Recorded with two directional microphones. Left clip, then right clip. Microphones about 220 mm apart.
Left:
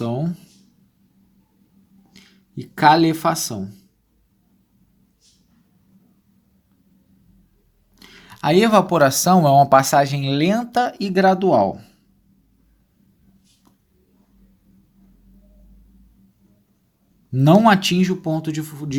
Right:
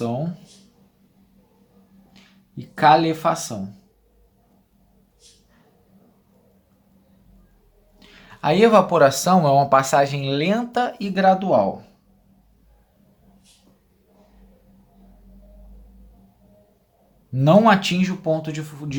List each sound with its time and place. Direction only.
0.0 s a sound: 45° left (ahead or behind)
2.1 s speech: 40° left (ahead or behind)
7.9 s speech: 40° left (ahead or behind)
17.3 s speech: 35° left (ahead or behind)